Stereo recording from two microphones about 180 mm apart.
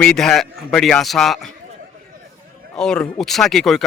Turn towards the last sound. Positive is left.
turn(degrees=0)  # may be behind; listen again after turning